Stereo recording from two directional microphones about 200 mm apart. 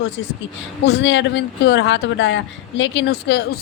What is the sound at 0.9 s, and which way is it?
A woman's voice, 65° left (ahead or behind).